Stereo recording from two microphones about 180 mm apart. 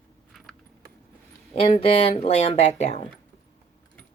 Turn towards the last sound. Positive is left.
turn(degrees=35)  # may be behind; listen again after turning